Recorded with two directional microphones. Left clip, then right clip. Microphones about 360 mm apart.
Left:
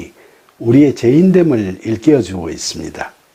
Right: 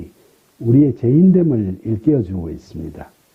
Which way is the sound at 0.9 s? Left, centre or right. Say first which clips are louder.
Left 5 dB; centre.